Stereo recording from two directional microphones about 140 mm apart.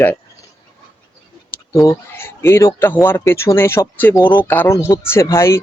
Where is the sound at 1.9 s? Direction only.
20° left (ahead or behind).